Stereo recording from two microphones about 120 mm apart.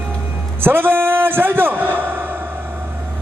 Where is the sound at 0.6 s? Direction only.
15° right (ahead or behind).